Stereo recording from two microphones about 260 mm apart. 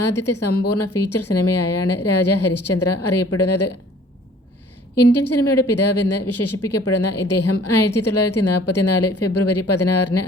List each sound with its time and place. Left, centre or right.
0.1 s a woman's voice: left
5.0 s a woman's voice: left